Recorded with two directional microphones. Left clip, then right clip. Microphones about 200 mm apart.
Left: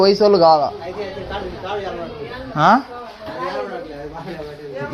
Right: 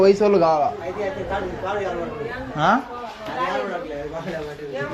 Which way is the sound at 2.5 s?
55° left (ahead or behind).